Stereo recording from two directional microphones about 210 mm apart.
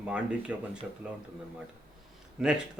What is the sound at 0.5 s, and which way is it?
Speech, 5° right (ahead or behind).